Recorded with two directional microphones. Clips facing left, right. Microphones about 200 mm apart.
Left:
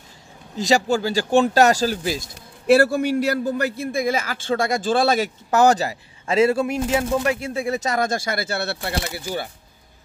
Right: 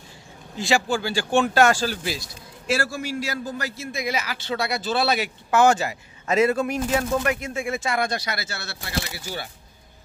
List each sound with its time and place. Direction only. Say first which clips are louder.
0.6 s speech: left 4 dB; 40° left (ahead or behind)
2.3 s a man's voice: left 12 dB; 60° left (ahead or behind)